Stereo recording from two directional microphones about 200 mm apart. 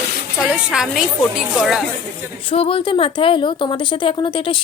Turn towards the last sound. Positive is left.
turn(degrees=25)  # may be behind; listen again after turning